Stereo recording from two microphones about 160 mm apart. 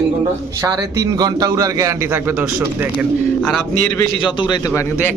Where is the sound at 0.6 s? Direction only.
20° right (ahead or behind).